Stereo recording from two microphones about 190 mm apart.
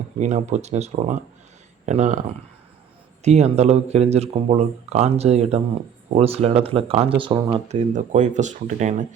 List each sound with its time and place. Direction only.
0.2 s speech: 40° right (ahead or behind)
3.2 s speech: 35° right (ahead or behind)
7.7 s speech: 40° right (ahead or behind)